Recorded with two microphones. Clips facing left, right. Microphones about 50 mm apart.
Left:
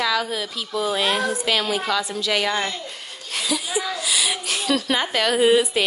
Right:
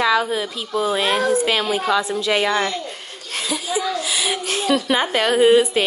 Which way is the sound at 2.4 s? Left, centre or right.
Right.